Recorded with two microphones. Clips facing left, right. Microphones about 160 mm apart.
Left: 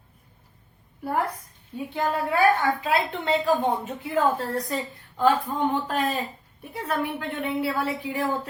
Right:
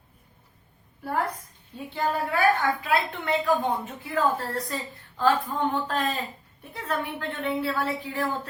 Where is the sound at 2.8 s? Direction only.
30° left (ahead or behind).